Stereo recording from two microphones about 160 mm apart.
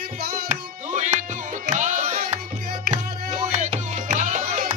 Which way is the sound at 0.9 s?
50° right (ahead or behind).